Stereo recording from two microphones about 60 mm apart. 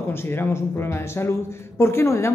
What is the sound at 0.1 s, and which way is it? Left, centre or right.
Speech, left.